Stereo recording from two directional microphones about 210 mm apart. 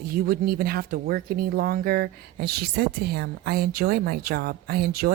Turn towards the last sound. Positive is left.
turn(degrees=-45)  # may be behind; listen again after turning